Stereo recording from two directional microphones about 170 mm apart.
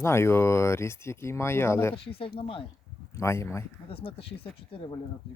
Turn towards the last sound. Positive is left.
turn(degrees=35)  # may be behind; listen again after turning